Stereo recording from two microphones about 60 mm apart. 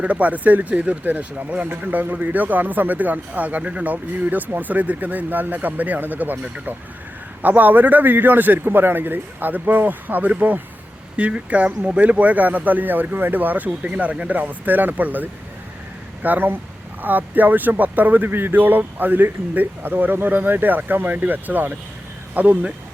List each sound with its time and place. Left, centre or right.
0.0 s speech: right
7.4 s speech: right